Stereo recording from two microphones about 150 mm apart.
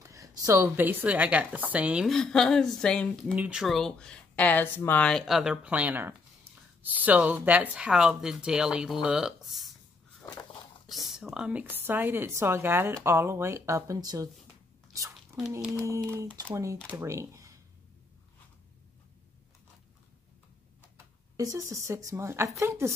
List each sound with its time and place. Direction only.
0.0 s a sound: 20° right (ahead or behind)
0.5 s a woman's voice: 15° right (ahead or behind); by 3.3 s 5° left (ahead or behind)
3.3 s speech: 5° right (ahead or behind)
10.9 s a woman's voice: centre (ahead or behind); by 14.3 s 25° right (ahead or behind)
14.9 s a sound: 20° right (ahead or behind)
15.7 s speech: 20° right (ahead or behind)
21.4 s speech: 20° right (ahead or behind)